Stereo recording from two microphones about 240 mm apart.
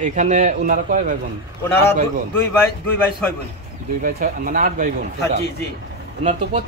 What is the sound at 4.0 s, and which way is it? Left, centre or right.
Speech, right.